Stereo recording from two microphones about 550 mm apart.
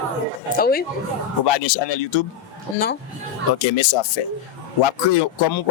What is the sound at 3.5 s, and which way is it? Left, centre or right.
Speech, left.